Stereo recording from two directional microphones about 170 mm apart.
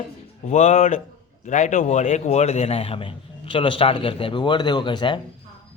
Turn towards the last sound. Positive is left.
turn(degrees=25)  # may be behind; listen again after turning